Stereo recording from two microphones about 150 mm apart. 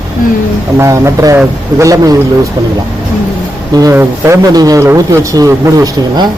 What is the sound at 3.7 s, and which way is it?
Speech, 20° right (ahead or behind).